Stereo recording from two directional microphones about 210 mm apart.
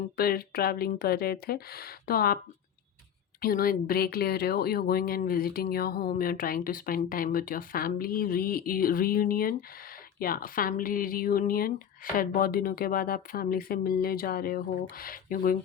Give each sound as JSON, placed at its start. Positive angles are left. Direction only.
{"t": 0.2, "sound": "speech", "side_deg": 45}
{"t": 3.4, "sound": "speech", "side_deg": 45}